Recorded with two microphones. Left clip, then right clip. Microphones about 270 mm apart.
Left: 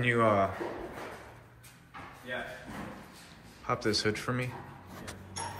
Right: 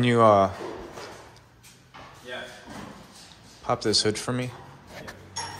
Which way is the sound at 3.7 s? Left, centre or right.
Centre.